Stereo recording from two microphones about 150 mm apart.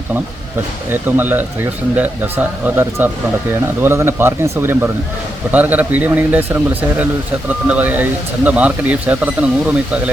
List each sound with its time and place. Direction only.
0.9 s speech: 15° right (ahead or behind)
7.7 s speech: 10° right (ahead or behind)